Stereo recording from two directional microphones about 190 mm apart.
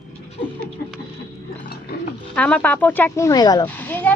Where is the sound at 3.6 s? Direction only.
10° left (ahead or behind).